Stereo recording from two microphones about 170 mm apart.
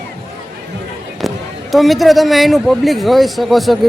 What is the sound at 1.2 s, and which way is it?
A man's voice, centre (ahead or behind).